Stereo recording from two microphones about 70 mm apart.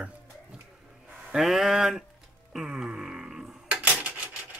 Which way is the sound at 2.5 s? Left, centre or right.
Centre.